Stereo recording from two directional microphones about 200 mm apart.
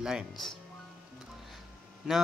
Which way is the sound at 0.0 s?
Centre (ahead or behind).